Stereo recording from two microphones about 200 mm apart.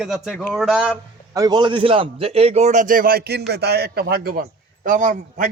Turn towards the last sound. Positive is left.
turn(degrees=-40)  # may be behind; listen again after turning